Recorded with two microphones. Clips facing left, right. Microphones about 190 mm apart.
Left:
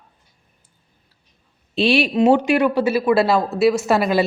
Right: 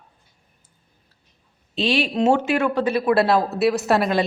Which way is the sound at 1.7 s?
10° left (ahead or behind).